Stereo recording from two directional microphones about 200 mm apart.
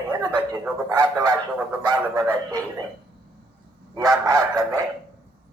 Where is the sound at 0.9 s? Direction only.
20° right (ahead or behind).